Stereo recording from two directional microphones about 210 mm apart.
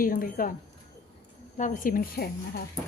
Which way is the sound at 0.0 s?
40° left (ahead or behind).